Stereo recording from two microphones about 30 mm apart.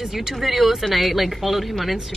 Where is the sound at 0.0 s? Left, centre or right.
Centre.